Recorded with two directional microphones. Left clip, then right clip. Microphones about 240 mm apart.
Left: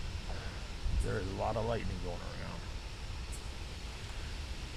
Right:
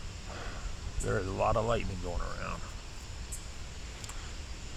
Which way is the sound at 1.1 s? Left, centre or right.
Right.